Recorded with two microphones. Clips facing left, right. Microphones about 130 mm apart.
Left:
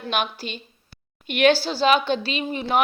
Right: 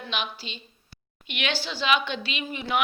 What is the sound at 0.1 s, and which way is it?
A woman's voice, 50° left (ahead or behind).